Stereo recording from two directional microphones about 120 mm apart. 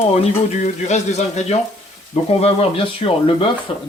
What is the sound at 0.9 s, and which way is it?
Speech, 70° left (ahead or behind).